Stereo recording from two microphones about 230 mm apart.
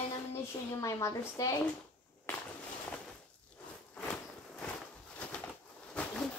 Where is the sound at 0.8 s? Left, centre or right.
Centre.